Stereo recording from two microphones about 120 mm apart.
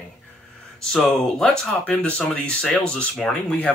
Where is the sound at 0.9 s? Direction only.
5° left (ahead or behind).